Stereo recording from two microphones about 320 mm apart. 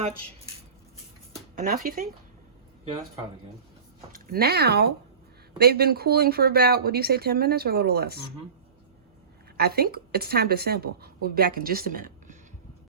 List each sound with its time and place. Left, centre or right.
1.5 s speech: right
4.1 s speech: right
9.6 s speech: right